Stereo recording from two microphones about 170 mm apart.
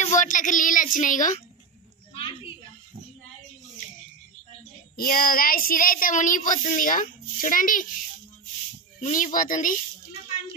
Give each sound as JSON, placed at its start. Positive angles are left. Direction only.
{"t": 0.0, "sound": "speech", "side_deg": 45}
{"t": 4.9, "sound": "child singing", "side_deg": 60}
{"t": 9.0, "sound": "child singing", "side_deg": 50}